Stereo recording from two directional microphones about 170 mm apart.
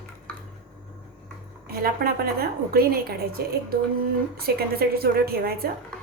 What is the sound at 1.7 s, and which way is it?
A woman's voice, 65° right (ahead or behind).